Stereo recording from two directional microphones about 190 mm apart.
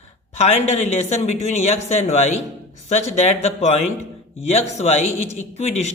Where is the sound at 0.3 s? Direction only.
35° left (ahead or behind).